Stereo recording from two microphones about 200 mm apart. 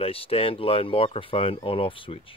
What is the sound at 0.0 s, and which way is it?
Speech, 30° left (ahead or behind).